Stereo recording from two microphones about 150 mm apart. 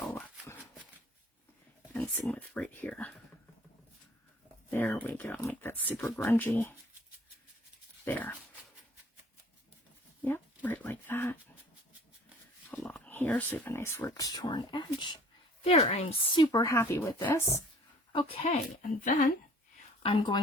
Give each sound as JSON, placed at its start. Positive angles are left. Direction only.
{"t": 0.0, "sound": "a sound", "side_deg": 10}
{"t": 2.1, "sound": "speech", "side_deg": 5}
{"t": 4.7, "sound": "speech", "side_deg": 15}
{"t": 8.0, "sound": "speech", "side_deg": 15}
{"t": 10.2, "sound": "a sound", "side_deg": 15}
{"t": 12.8, "sound": "speech", "side_deg": 10}
{"t": 15.6, "sound": "a woman's voice", "side_deg": 45}
{"t": 16.3, "sound": "speech", "side_deg": 25}
{"t": 18.4, "sound": "speech", "side_deg": 60}
{"t": 20.0, "sound": "a woman's voice", "side_deg": 40}